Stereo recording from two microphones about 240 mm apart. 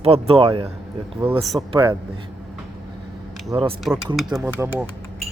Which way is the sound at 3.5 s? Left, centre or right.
Right.